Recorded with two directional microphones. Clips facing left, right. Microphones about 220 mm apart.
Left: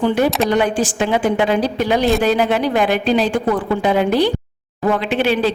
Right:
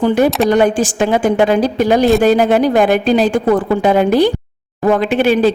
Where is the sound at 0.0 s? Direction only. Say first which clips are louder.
Right 4 dB; 45° right (ahead or behind).